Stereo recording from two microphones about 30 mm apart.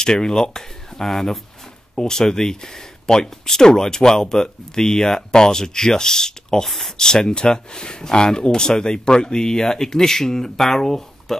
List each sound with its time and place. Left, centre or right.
0.0 s speech: left; by 1.4 s centre
2.0 s speech: centre